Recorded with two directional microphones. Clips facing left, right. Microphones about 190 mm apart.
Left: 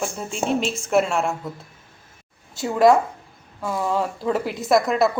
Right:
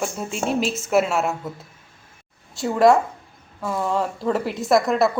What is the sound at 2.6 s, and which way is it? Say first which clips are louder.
Speech: even; centre (ahead or behind).